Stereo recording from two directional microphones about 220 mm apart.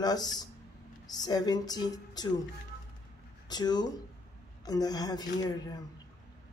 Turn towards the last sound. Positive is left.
turn(degrees=15)  # may be behind; listen again after turning